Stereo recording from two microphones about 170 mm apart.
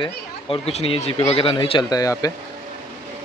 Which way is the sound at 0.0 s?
35° left (ahead or behind).